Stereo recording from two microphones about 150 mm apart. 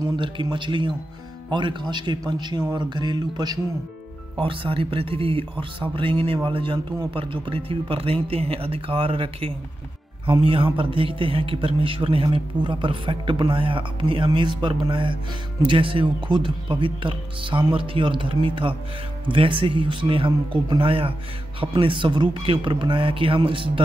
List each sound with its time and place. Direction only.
0.0 s a man's voice: 30° right (ahead or behind)